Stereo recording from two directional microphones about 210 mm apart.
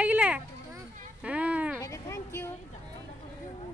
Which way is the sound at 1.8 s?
15° left (ahead or behind).